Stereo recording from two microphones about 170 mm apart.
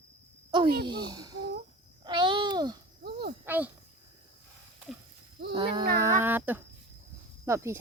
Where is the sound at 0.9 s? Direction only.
25° right (ahead or behind).